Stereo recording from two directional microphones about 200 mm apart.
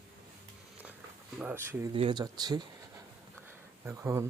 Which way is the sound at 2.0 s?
25° right (ahead or behind).